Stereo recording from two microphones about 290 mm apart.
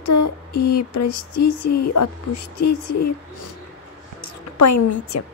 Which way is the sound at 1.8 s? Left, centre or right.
Left.